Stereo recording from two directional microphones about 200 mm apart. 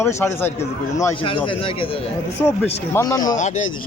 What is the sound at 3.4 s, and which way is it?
Speech, 35° left (ahead or behind).